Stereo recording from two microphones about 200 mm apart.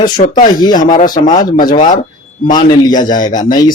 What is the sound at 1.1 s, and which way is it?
Speech, 20° left (ahead or behind).